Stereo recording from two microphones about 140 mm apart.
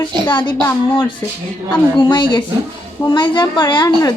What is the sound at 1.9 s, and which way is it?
A woman's voice, 35° left (ahead or behind).